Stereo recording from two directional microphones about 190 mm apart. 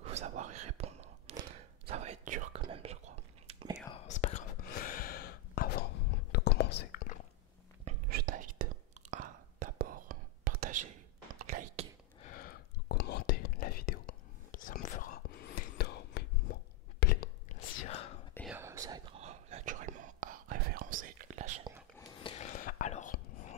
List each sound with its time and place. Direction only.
0.0 s whispering: 35° right (ahead or behind)
3.9 s whispering: 35° left (ahead or behind); by 7.0 s 60° left (ahead or behind)
8.1 s whispering: 50° right (ahead or behind)
12.2 s whispering: 45° left (ahead or behind)
16.5 s a sound: 60° left (ahead or behind)
17.5 s whispering: 35° left (ahead or behind)
18.5 s whispering: 15° right (ahead or behind)
19.1 s whispering: 35° right (ahead or behind)
21.9 s a sound: 20° left (ahead or behind)
22.3 s whispering: 35° left (ahead or behind)